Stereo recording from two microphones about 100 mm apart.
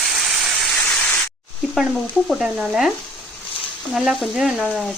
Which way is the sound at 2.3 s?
5° right (ahead or behind).